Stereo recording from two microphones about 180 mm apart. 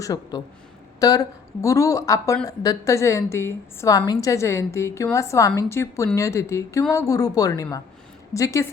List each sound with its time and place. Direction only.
0.0 s a woman's voice: 20° left (ahead or behind)